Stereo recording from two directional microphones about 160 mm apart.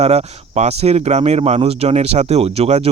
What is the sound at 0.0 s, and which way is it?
Speech, 40° right (ahead or behind).